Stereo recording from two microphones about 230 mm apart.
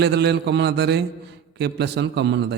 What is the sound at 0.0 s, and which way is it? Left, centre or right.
A man's voice, right.